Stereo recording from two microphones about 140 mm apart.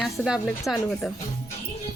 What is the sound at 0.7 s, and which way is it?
Speech, 15° left (ahead or behind).